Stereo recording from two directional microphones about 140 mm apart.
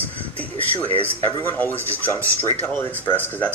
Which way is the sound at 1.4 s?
15° left (ahead or behind).